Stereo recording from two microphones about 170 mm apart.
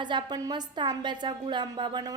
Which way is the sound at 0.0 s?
25° right (ahead or behind).